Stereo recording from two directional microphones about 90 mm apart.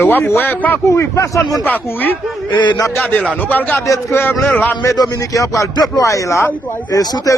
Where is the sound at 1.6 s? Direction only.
20° left (ahead or behind).